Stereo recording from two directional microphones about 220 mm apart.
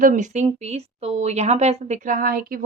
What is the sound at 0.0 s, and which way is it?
Speech, 35° right (ahead or behind).